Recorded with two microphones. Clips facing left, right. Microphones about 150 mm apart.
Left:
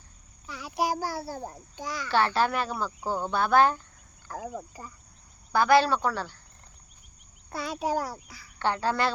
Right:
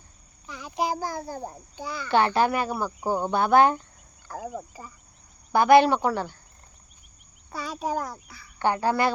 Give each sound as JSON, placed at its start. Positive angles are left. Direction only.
{"t": 0.4, "sound": "a child's voice", "side_deg": 10}
{"t": 1.4, "sound": "speech", "side_deg": -10}
{"t": 1.7, "sound": "speech", "side_deg": 10}
{"t": 2.0, "sound": "speech", "side_deg": -15}
{"t": 7.9, "sound": "speech", "side_deg": 10}
{"t": 8.5, "sound": "speech", "side_deg": -15}